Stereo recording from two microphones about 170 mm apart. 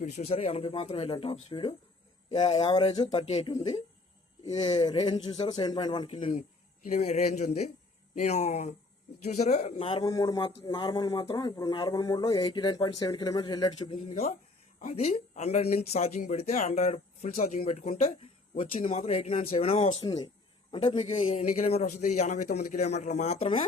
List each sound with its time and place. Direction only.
0.0 s speech: 40° left (ahead or behind)
6.8 s a man's voice: 45° left (ahead or behind); by 13.9 s 25° left (ahead or behind)
14.1 s speech: 40° left (ahead or behind)
20.0 s speech: 25° left (ahead or behind)
21.0 s a man's voice: 45° left (ahead or behind)